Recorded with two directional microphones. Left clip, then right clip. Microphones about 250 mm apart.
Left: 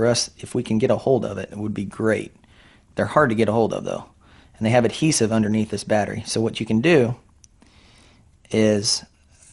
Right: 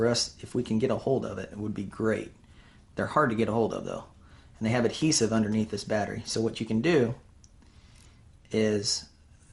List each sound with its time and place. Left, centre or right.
0.0 s speech: left
8.4 s speech: left